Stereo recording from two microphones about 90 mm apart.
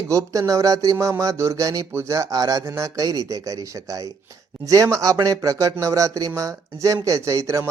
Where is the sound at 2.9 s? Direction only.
45° right (ahead or behind).